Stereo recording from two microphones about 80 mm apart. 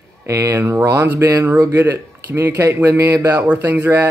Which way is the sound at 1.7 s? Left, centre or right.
Right.